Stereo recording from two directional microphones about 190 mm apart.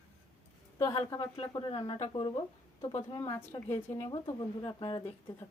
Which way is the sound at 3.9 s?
25° left (ahead or behind).